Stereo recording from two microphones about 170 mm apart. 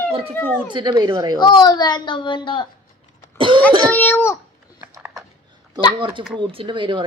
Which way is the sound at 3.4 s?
30° right (ahead or behind).